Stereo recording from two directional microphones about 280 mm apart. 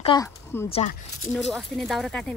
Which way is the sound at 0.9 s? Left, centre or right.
Left.